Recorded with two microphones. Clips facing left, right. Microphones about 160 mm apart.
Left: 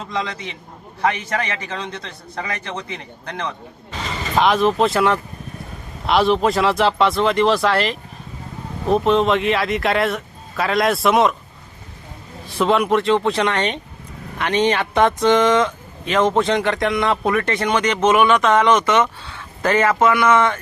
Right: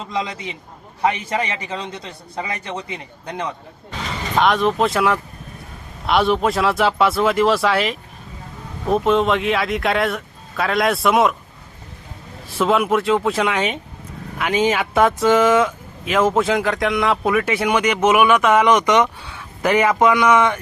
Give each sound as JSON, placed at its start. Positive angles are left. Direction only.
{"t": 0.1, "sound": "speech", "side_deg": -10}
{"t": 4.4, "sound": "speech", "side_deg": 0}
{"t": 12.5, "sound": "speech", "side_deg": 0}